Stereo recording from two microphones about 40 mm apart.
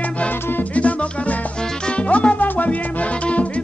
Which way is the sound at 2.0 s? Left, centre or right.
Left.